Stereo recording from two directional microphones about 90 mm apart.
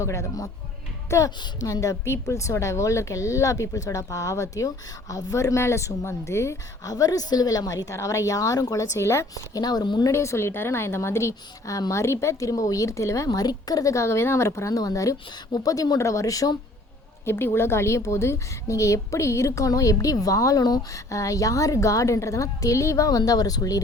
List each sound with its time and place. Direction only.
0.0 s a woman's voice: 35° left (ahead or behind)
6.9 s a woman's voice: 45° left (ahead or behind)
9.3 s speech: 45° left (ahead or behind)
10.1 s a woman's voice: 30° left (ahead or behind)
17.2 s a woman's voice: 25° left (ahead or behind); by 23.8 s 45° left (ahead or behind)